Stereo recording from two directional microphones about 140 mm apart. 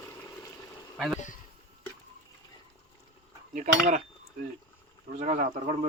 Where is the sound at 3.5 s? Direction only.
70° right (ahead or behind).